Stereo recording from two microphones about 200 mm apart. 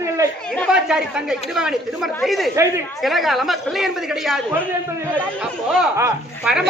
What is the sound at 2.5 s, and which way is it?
Speech, 15° right (ahead or behind).